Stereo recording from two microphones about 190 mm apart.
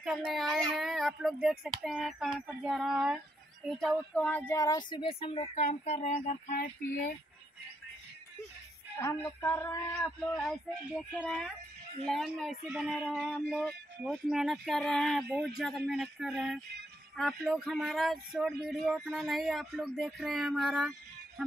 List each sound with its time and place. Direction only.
0.0 s speech: 5° right (ahead or behind); by 6.6 s 40° left (ahead or behind)
9.4 s female singing: 15° left (ahead or behind)
10.0 s speech: centre (ahead or behind)
12.1 s speech: centre (ahead or behind)